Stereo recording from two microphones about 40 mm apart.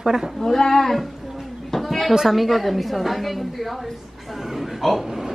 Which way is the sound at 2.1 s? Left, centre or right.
Centre.